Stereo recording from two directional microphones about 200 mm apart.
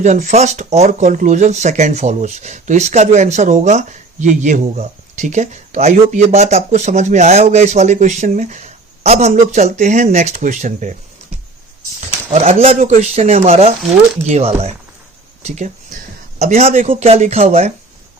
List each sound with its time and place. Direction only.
0.0 s speech: 35° right (ahead or behind)
11.9 s speech: 30° right (ahead or behind)
15.4 s a sound: 35° right (ahead or behind)
16.4 s speech: 30° right (ahead or behind)